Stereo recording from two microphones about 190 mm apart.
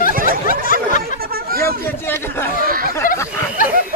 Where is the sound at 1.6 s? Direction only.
10° left (ahead or behind).